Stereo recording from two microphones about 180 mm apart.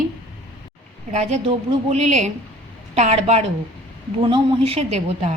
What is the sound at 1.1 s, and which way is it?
A woman's voice, 40° right (ahead or behind).